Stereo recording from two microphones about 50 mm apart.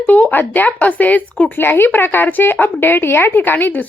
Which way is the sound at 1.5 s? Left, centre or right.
Left.